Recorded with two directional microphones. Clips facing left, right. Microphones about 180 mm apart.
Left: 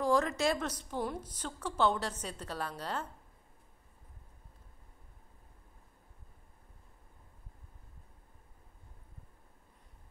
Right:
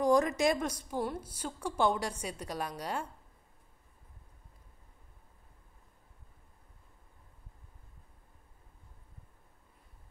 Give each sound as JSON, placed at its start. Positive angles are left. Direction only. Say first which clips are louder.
{"t": 0.0, "sound": "a woman's voice", "louder": "right 3 dB", "side_deg": -15}